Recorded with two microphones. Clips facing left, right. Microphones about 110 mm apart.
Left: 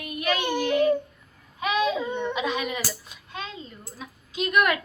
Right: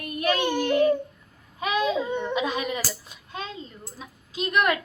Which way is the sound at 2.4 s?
35° right (ahead or behind).